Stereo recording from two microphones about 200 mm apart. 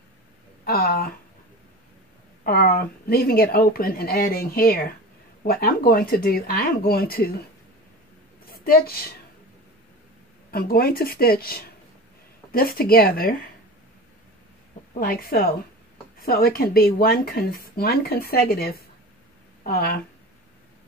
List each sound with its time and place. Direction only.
0.7 s speech: 50° left (ahead or behind)
2.4 s speech: 50° left (ahead or behind)
8.5 s a woman's voice: 50° left (ahead or behind)
10.5 s speech: 50° left (ahead or behind)
15.0 s speech: 50° left (ahead or behind)